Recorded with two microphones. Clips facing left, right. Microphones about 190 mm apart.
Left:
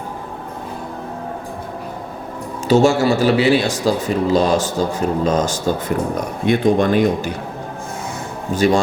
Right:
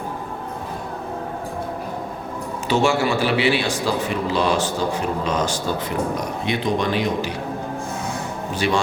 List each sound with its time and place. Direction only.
2.6 s speech: 40° left (ahead or behind)
8.5 s speech: 45° left (ahead or behind)